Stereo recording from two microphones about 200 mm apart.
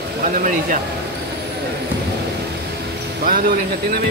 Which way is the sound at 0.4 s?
40° right (ahead or behind).